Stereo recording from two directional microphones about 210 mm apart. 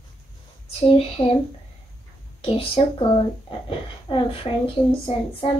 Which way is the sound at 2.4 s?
25° left (ahead or behind).